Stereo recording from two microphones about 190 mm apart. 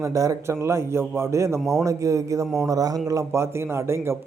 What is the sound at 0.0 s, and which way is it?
A man's voice, 15° right (ahead or behind).